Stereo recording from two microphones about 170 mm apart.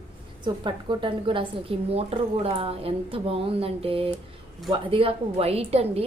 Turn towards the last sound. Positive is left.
turn(degrees=-35)  # may be behind; listen again after turning